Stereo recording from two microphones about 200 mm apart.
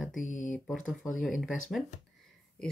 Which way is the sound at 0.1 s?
40° left (ahead or behind).